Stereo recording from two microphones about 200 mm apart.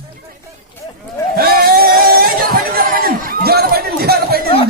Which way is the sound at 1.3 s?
50° right (ahead or behind).